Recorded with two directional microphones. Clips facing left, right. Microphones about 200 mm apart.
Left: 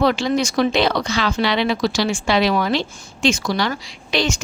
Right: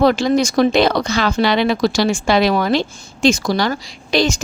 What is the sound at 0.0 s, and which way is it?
Speech, 40° right (ahead or behind).